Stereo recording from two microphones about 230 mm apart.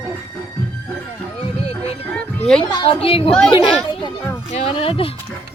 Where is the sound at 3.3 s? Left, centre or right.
Centre.